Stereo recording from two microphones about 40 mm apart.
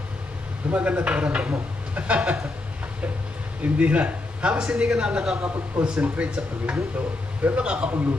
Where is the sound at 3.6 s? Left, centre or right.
Right.